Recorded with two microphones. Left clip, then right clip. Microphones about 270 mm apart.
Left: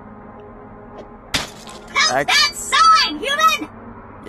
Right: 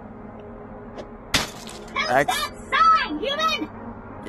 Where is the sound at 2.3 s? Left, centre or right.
Left.